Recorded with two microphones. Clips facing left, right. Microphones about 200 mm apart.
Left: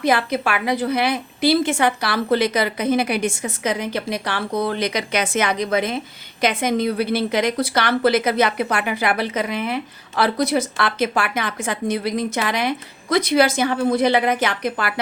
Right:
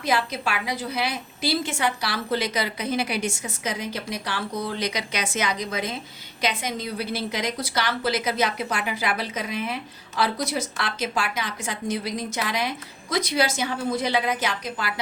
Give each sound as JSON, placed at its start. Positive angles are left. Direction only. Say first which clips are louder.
{"t": 0.0, "sound": "a woman's voice", "louder": "left 6 dB", "side_deg": 60}